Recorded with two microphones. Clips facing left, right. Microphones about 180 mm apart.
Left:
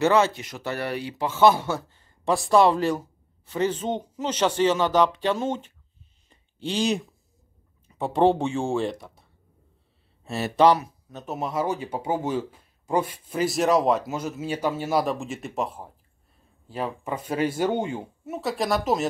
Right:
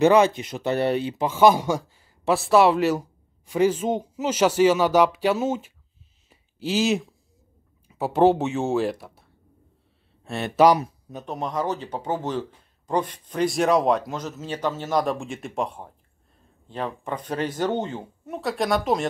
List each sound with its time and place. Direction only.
0.0 s speech: 15° right (ahead or behind)
6.2 s a sound: 5° right (ahead or behind)
7.9 s speech: 5° right (ahead or behind)